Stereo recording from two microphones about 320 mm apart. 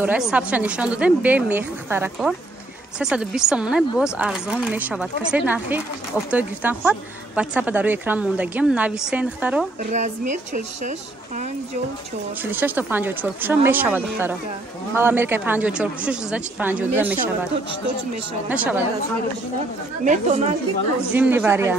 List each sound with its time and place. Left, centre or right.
0.0 s a woman's voice: centre
9.8 s a woman's voice: right
12.4 s a woman's voice: centre
18.5 s a woman's voice: centre
20.1 s a woman's voice: right
21.1 s a woman's voice: centre